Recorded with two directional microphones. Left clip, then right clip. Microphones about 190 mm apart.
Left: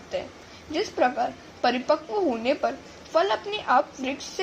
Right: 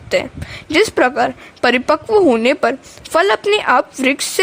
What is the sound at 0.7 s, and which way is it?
A woman's voice, 55° right (ahead or behind).